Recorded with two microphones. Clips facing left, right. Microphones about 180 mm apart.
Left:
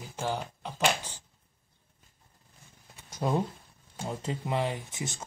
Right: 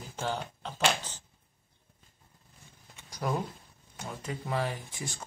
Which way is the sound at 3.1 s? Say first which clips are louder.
Left 3 dB; 25° left (ahead or behind).